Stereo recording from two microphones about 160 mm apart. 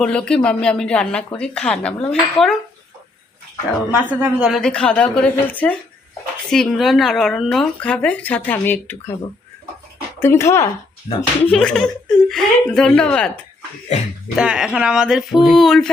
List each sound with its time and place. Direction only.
0.0 s speech: 5° left (ahead or behind)
3.9 s speech: 10° right (ahead or behind); by 9.1 s 15° left (ahead or behind)
10.2 s speech: 15° left (ahead or behind)
11.5 s speech: 5° left (ahead or behind)
14.3 s speech: 5° right (ahead or behind)